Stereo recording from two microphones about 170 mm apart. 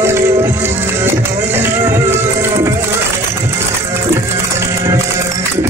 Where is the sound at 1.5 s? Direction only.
15° right (ahead or behind).